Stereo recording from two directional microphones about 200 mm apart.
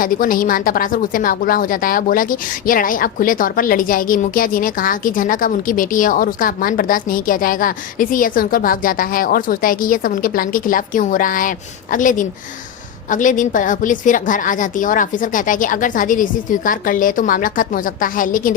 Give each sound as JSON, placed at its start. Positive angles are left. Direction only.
{"t": 0.0, "sound": "a woman's voice", "side_deg": 45}